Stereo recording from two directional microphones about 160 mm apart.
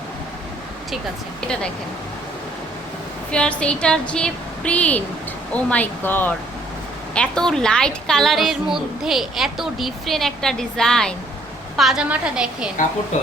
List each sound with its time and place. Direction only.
3.3 s a woman's voice: 5° left (ahead or behind)